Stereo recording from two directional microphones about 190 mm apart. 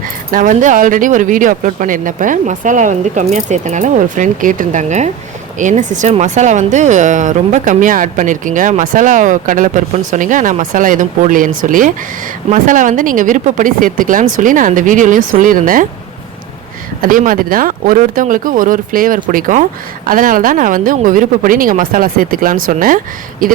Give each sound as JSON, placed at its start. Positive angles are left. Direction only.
{"t": 0.0, "sound": "speech", "side_deg": -45}
{"t": 17.0, "sound": "speech", "side_deg": -45}